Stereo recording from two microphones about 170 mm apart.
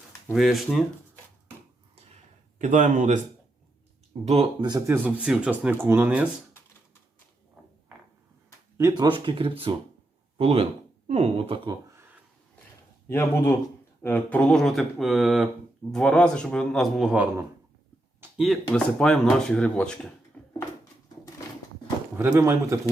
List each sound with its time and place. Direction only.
0.3 s speech: centre (ahead or behind)
2.6 s a man's voice: 45° right (ahead or behind)
4.3 s speech: 35° right (ahead or behind)
4.9 s speech: 10° right (ahead or behind)
8.8 s speech: 25° right (ahead or behind)
13.1 s speech: 15° left (ahead or behind)
22.2 s speech: 15° right (ahead or behind)